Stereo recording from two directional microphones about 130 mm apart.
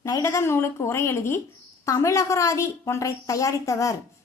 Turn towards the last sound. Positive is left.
turn(degrees=25)  # may be behind; listen again after turning